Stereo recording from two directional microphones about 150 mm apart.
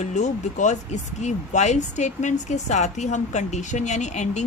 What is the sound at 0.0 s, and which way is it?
Speech, 50° left (ahead or behind).